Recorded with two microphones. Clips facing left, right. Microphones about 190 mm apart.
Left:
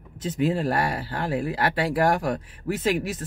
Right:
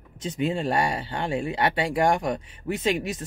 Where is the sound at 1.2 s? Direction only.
25° right (ahead or behind).